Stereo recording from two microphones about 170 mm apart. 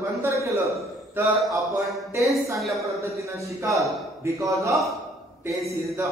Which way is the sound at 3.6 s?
15° right (ahead or behind).